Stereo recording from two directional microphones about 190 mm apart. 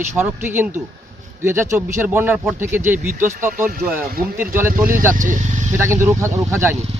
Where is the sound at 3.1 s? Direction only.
40° right (ahead or behind).